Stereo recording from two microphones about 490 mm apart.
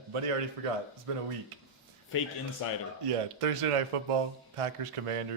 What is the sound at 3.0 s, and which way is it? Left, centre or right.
Speech, right.